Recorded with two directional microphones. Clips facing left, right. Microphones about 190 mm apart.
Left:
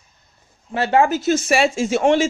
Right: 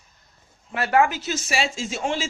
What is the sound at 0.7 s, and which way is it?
Speech, 25° left (ahead or behind).